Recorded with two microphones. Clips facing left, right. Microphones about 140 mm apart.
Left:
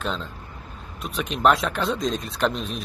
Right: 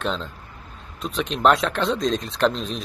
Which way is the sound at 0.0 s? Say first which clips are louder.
Right 2 dB; centre (ahead or behind).